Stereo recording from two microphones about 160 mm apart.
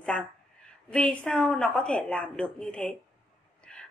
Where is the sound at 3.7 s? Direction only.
5° left (ahead or behind).